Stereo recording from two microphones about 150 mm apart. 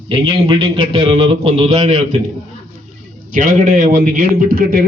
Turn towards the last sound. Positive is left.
turn(degrees=-75)  # may be behind; listen again after turning